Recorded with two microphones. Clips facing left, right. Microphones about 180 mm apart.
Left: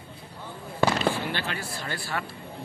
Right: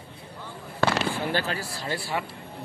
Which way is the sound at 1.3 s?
40° right (ahead or behind).